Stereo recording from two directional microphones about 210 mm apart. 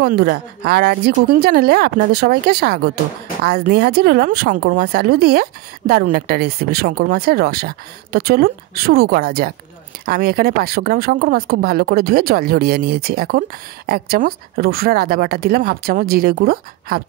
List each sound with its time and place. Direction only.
0.0 s speech: 50° right (ahead or behind)